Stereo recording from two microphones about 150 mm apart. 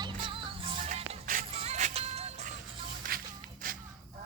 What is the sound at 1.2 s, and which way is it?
Music, 65° right (ahead or behind).